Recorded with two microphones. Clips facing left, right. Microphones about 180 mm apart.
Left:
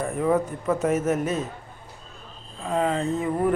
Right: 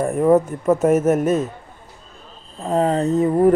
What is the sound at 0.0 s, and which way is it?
A man's voice, 45° right (ahead or behind).